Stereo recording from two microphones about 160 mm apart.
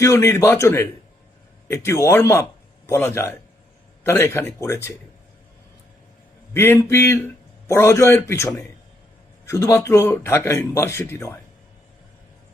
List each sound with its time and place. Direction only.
0.0 s a man's voice: 20° left (ahead or behind)
6.5 s speech: 15° left (ahead or behind)